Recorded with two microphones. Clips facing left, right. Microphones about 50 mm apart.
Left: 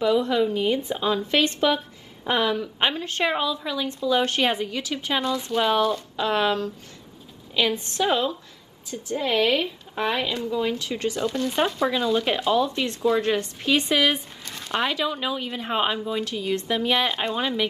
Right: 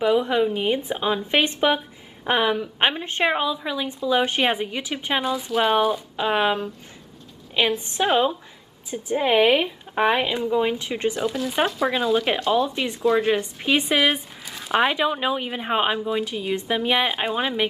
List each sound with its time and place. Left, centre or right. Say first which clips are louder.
0.0 s a woman's voice: right 1 dB; right
5.3 s a woman's voice: right 2 dB; centre
11.1 s a woman's voice: left 2 dB; centre
14.8 s a woman's voice: right 4 dB; right